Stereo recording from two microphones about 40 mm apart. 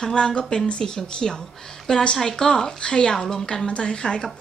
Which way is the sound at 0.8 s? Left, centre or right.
Centre.